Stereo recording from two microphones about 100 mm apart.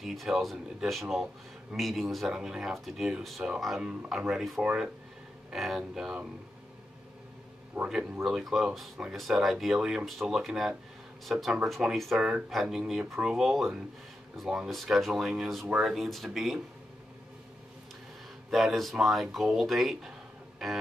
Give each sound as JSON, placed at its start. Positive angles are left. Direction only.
{"t": 0.0, "sound": "speech", "side_deg": 0}
{"t": 7.8, "sound": "speech", "side_deg": -15}
{"t": 18.5, "sound": "speech", "side_deg": 0}